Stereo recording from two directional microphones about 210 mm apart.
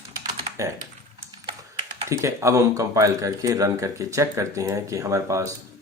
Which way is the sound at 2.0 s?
15° right (ahead or behind).